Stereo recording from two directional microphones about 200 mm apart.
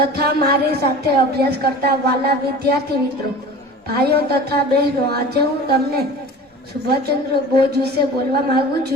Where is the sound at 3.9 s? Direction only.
50° right (ahead or behind).